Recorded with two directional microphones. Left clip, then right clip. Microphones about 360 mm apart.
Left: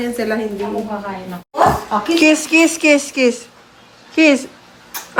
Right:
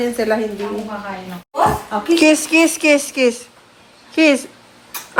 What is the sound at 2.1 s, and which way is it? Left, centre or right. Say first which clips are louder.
A woman's voice: even; centre.